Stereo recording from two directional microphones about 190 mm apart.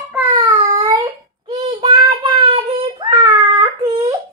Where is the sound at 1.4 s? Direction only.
20° right (ahead or behind).